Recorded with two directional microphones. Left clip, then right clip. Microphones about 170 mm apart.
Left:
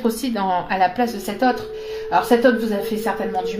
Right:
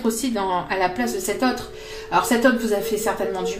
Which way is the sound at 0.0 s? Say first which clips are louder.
Left 2 dB; 30° left (ahead or behind).